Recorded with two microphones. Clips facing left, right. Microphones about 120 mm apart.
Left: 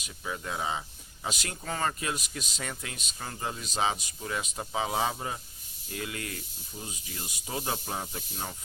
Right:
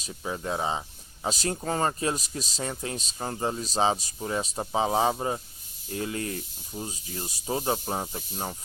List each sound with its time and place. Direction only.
0.0 s speech: 35° right (ahead or behind)